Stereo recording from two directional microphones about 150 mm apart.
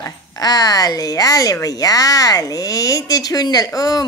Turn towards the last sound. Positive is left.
turn(degrees=25)  # may be behind; listen again after turning